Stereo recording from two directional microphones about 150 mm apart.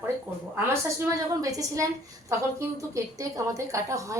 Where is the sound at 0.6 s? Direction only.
20° right (ahead or behind).